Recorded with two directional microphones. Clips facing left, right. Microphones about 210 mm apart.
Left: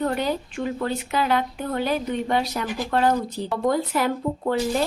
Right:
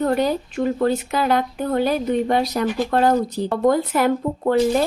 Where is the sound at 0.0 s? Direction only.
40° right (ahead or behind).